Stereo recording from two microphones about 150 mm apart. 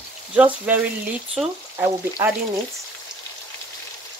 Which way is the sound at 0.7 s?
10° right (ahead or behind).